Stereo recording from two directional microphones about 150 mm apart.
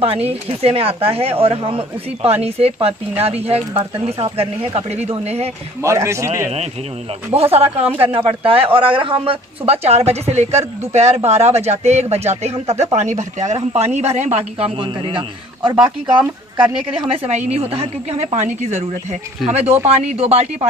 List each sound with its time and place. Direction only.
0.0 s speech: 40° right (ahead or behind)
5.8 s a man's voice: 20° right (ahead or behind)
7.5 s speech: 40° right (ahead or behind)
17.1 s speech: 45° right (ahead or behind)